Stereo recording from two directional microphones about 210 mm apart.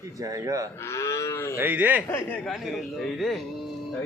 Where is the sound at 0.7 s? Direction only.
15° left (ahead or behind).